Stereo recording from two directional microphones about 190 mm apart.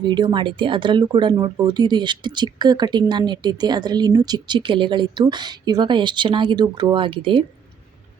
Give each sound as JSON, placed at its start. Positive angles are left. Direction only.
{"t": 0.0, "sound": "speech", "side_deg": -25}